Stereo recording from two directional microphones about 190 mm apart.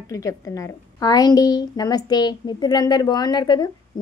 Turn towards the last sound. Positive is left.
turn(degrees=20)  # may be behind; listen again after turning